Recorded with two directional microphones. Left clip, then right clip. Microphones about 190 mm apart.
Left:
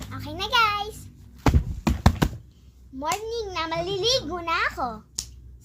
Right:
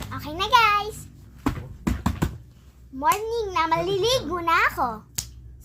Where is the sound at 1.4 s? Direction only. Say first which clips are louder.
Left 3 dB; 55° left (ahead or behind).